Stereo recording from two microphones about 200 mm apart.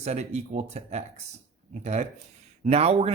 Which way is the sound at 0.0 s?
35° right (ahead or behind).